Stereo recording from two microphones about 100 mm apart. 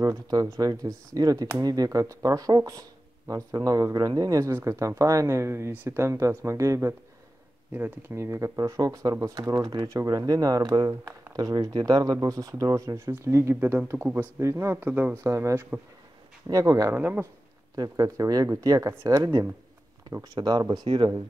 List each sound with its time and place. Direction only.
0.0 s speech: 35° right (ahead or behind)
13.9 s speech: 15° right (ahead or behind)
14.4 s speech: 30° right (ahead or behind)
15.2 s speech: 30° right (ahead or behind)
16.9 s speech: 20° right (ahead or behind)
17.7 s speech: 35° right (ahead or behind)